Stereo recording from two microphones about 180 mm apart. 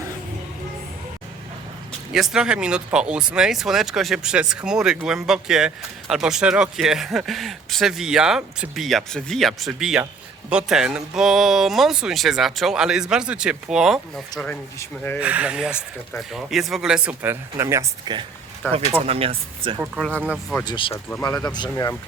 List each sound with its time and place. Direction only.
2.1 s speech: 5° right (ahead or behind)
15.2 s speech: 5° right (ahead or behind); by 18.3 s 25° right (ahead or behind)
18.6 s speech: 15° left (ahead or behind)
19.0 s speech: 30° right (ahead or behind)
20.0 s speech: 5° left (ahead or behind)
20.2 s speech: 5° right (ahead or behind)
20.7 s speech: 30° left (ahead or behind)
20.9 s speech: 15° left (ahead or behind)